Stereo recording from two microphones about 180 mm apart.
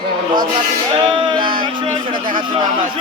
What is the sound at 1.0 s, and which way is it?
Music, 25° right (ahead or behind).